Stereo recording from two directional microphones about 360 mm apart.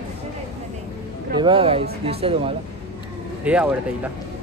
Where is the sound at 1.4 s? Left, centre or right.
Centre.